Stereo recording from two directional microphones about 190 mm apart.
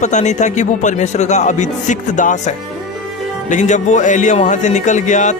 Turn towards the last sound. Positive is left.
turn(degrees=40)  # may be behind; listen again after turning